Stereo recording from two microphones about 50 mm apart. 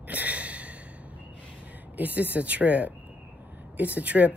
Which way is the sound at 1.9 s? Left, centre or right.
Right.